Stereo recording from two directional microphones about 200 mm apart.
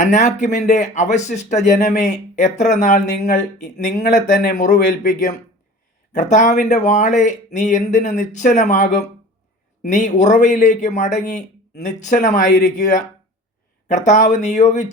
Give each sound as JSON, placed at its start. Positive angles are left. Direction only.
{"t": 0.0, "sound": "speech", "side_deg": 35}